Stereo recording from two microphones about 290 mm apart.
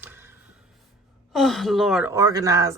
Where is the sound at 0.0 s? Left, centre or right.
Centre.